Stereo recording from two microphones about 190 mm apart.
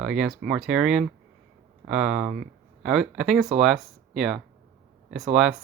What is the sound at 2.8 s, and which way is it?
Speech, 5° right (ahead or behind).